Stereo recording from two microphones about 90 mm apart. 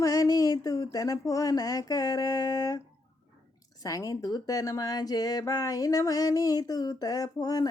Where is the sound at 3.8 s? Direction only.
40° left (ahead or behind).